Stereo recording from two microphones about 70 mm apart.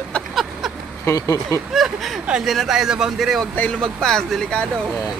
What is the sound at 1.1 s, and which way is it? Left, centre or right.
Speech, left.